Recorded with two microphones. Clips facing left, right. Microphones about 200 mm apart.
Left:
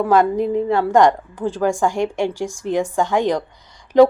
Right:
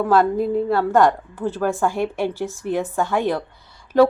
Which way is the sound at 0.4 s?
15° left (ahead or behind).